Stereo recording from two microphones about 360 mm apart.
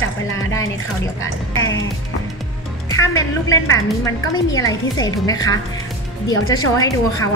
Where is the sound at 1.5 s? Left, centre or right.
Left.